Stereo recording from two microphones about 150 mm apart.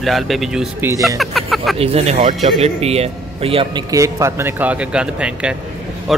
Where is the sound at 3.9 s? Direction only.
20° right (ahead or behind).